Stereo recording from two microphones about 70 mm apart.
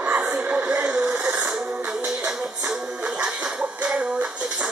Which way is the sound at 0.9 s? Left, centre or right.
Centre.